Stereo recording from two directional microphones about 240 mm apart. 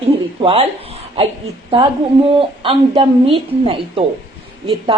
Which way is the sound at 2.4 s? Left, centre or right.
Right.